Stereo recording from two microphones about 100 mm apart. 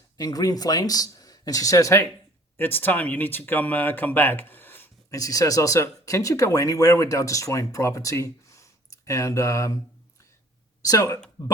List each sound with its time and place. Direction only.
0.2 s speech: 40° left (ahead or behind)
2.6 s speech: 20° left (ahead or behind)
5.1 s speech: 35° left (ahead or behind)
10.8 s speech: 35° left (ahead or behind)